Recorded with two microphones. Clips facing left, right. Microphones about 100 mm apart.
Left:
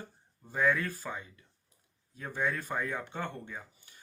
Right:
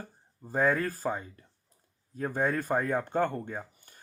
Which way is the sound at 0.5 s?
40° right (ahead or behind).